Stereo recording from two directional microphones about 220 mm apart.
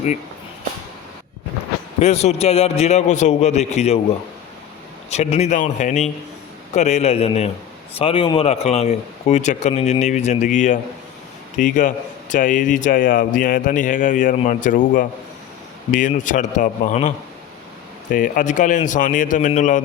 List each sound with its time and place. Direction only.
2.0 s a man's voice: 30° left (ahead or behind)
5.1 s a man's voice: 30° left (ahead or behind)